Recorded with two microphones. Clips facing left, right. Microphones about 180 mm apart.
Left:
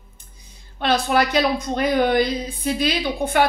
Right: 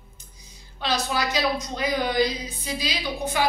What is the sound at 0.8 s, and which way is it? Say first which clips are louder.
Speech: left 7 dB; 55° left (ahead or behind).